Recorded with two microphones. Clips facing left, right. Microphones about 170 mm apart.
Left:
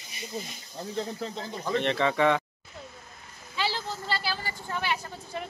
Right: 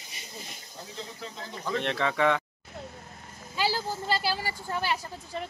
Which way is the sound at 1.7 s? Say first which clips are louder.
Left 3 dB; centre (ahead or behind).